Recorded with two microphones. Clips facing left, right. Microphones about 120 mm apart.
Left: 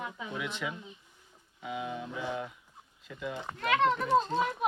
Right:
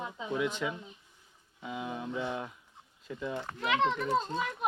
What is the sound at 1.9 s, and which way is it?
Speech, 30° right (ahead or behind).